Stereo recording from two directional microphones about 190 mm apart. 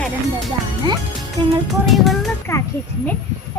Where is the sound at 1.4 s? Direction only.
25° right (ahead or behind).